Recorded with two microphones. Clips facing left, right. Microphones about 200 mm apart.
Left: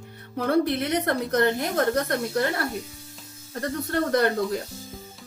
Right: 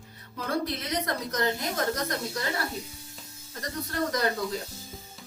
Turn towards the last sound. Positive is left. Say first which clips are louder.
# left 6 dB
turn(degrees=60)  # may be behind; listen again after turning